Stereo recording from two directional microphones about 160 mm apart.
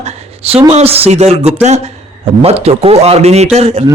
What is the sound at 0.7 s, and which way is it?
A man's voice, 40° right (ahead or behind).